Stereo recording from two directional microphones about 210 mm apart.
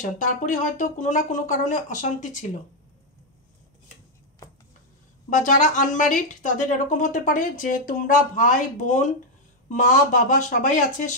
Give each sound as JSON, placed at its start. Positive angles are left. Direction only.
{"t": 0.0, "sound": "speech", "side_deg": 35}
{"t": 5.3, "sound": "speech", "side_deg": 35}